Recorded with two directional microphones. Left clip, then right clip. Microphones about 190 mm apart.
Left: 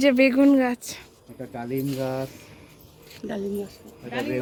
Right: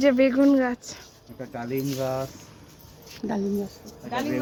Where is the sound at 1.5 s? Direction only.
40° left (ahead or behind).